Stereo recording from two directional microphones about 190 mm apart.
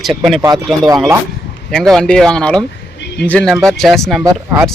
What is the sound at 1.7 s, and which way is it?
Speech, 5° left (ahead or behind).